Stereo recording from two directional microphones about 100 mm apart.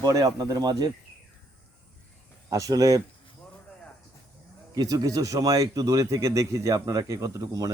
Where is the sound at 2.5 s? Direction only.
35° right (ahead or behind).